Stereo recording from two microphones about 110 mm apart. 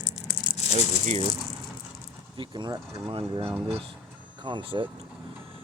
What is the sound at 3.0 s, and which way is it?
Speech, 55° right (ahead or behind).